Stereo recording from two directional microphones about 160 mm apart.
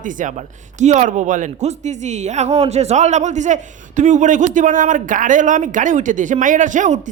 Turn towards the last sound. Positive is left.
turn(degrees=-50)  # may be behind; listen again after turning